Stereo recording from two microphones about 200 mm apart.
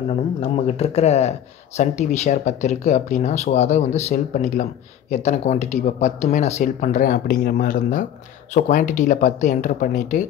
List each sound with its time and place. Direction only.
0.1 s speech: 30° left (ahead or behind)